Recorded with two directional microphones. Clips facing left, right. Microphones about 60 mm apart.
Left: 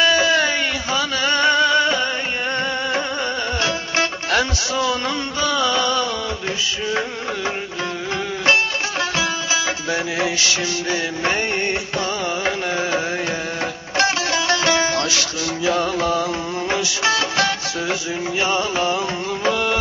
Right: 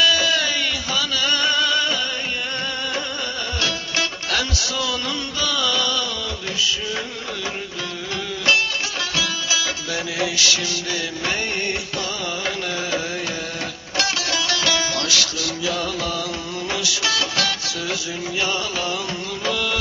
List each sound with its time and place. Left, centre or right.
0.0 s music: left
3.6 s music: left
9.1 s music: left
12.4 s music: left